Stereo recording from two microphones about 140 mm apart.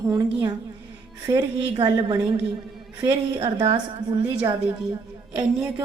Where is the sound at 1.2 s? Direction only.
30° right (ahead or behind).